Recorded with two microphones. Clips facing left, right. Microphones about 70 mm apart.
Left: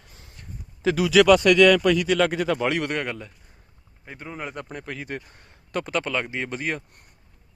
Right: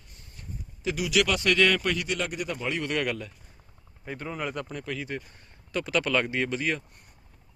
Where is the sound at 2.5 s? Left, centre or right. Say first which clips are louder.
Left 7 dB; left.